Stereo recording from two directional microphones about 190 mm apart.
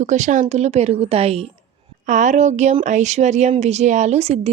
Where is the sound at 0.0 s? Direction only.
40° right (ahead or behind).